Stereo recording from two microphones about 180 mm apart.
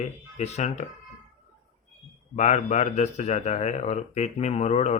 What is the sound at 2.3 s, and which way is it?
A man's voice, 40° left (ahead or behind).